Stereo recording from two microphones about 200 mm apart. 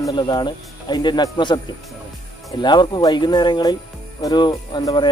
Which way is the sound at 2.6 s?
20° left (ahead or behind).